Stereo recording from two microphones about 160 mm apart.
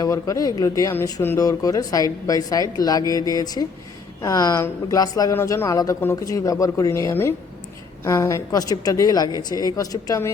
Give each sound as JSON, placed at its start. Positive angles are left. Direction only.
{"t": 0.0, "sound": "speech", "side_deg": 20}